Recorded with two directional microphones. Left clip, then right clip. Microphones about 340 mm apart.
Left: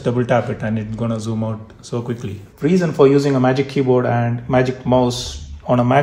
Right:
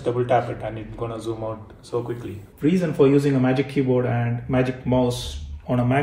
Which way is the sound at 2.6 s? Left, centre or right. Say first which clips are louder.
Left 5 dB; centre.